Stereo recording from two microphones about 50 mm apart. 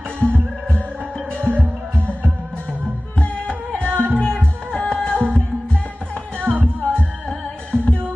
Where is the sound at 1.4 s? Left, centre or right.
Right.